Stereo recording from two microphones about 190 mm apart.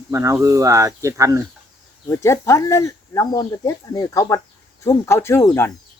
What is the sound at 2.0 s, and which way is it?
Speech, 15° left (ahead or behind).